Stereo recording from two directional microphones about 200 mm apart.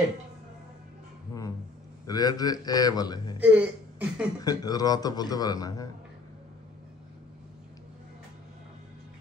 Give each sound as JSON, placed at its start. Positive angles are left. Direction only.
{"t": 2.0, "sound": "a man's voice", "side_deg": 20}
{"t": 3.3, "sound": "speech", "side_deg": -5}
{"t": 4.4, "sound": "a man's voice", "side_deg": 20}